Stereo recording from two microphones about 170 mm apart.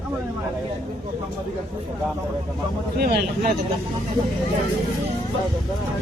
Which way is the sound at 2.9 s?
65° right (ahead or behind).